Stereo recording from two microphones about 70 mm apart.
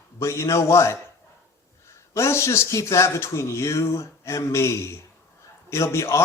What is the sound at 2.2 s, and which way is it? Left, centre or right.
Speech, left.